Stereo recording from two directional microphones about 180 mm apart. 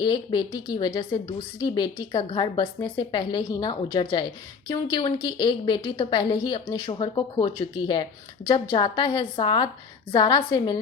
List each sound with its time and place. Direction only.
0.0 s a woman's voice: 25° left (ahead or behind)